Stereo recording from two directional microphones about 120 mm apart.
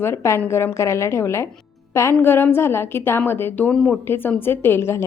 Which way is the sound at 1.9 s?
20° left (ahead or behind).